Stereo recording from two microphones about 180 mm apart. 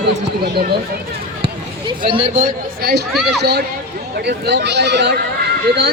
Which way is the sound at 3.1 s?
5° right (ahead or behind).